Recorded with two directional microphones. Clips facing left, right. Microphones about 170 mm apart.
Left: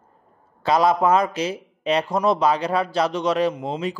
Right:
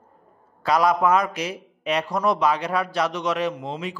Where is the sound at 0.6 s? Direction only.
25° left (ahead or behind).